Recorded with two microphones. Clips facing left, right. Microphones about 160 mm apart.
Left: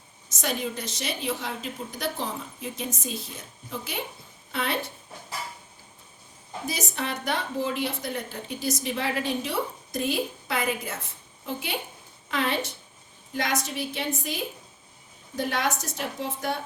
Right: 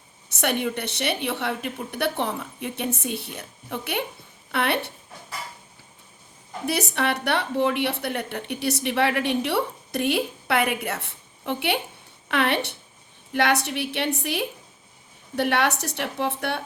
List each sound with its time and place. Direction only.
0.3 s a woman's voice: 65° right (ahead or behind)
6.7 s a woman's voice: 70° right (ahead or behind)